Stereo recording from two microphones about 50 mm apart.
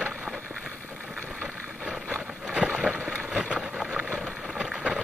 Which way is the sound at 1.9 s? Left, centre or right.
Left.